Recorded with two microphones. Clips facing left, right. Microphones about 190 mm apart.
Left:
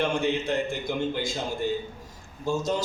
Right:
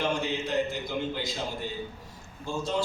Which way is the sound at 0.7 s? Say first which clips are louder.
Left 3 dB; 50° left (ahead or behind).